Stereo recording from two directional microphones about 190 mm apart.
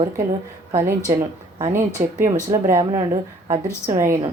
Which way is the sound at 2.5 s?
15° right (ahead or behind).